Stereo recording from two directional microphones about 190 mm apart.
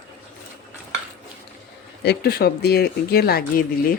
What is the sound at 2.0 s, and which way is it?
Speech, 55° left (ahead or behind).